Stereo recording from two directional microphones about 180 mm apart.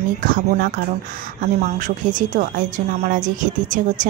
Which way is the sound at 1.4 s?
40° right (ahead or behind).